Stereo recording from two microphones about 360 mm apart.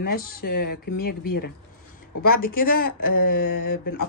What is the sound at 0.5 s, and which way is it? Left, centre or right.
Speech, left.